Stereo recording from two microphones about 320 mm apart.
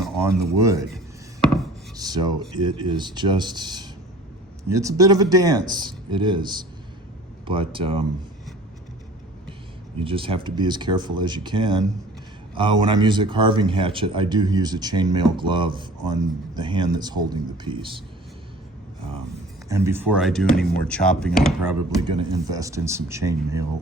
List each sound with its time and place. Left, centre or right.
0.1 s speech: centre
2.0 s speech: centre
10.0 s speech: centre
19.6 s speech: centre